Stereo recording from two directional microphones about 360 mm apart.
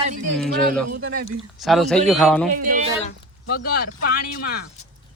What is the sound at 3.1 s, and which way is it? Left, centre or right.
Speech, left.